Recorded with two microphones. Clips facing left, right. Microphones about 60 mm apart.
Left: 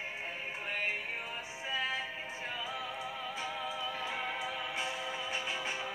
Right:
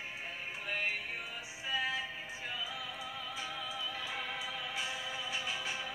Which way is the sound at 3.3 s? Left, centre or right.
Left.